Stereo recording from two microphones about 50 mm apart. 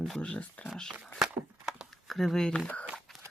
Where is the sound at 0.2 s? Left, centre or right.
Left.